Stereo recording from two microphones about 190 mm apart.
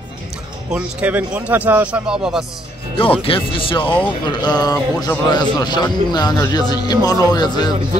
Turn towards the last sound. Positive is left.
turn(degrees=20)  # may be behind; listen again after turning